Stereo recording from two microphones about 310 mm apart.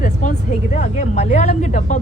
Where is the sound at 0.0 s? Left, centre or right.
Left.